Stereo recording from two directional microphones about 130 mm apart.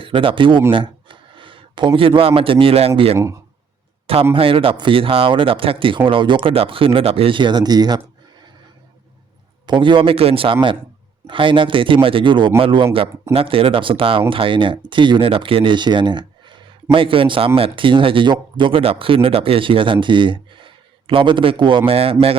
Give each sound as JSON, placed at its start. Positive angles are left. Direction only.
{"t": 0.0, "sound": "speech", "side_deg": -40}
{"t": 3.2, "sound": "speech", "side_deg": -25}
{"t": 4.0, "sound": "a man's voice", "side_deg": -45}
{"t": 9.6, "sound": "speech", "side_deg": -40}